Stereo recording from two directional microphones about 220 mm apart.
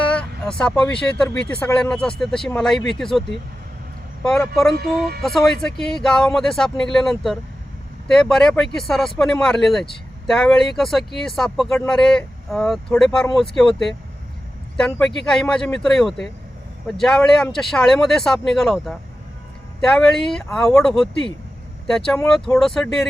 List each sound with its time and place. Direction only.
0.1 s speech: 5° left (ahead or behind)
4.7 s speech: 45° right (ahead or behind)
5.2 s speech: centre (ahead or behind)